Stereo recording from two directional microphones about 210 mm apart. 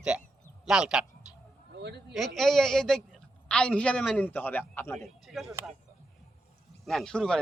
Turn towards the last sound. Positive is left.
turn(degrees=5)  # may be behind; listen again after turning